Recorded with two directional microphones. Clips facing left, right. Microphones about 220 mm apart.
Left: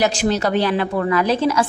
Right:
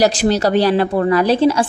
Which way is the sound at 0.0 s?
35° right (ahead or behind).